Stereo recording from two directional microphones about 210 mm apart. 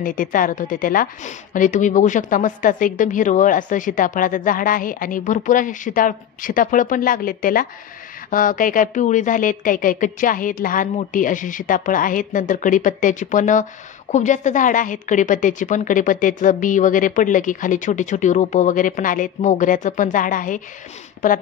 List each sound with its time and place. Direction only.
0.0 s a woman's voice: 40° left (ahead or behind)